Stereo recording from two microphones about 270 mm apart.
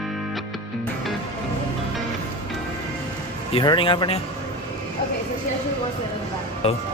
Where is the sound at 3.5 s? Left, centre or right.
Centre.